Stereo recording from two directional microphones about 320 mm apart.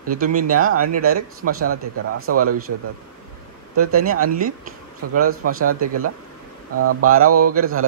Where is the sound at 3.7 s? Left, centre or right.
Right.